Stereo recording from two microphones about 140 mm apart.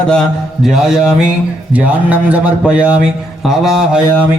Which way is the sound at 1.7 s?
10° right (ahead or behind).